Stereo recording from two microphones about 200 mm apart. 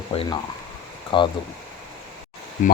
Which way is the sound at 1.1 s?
25° left (ahead or behind).